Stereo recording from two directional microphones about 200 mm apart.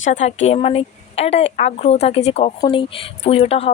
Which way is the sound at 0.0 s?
35° left (ahead or behind).